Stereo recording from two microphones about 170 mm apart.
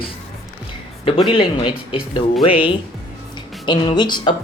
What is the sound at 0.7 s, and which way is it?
Speech, 30° left (ahead or behind).